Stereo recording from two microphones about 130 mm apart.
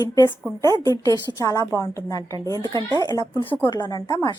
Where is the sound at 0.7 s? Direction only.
25° right (ahead or behind).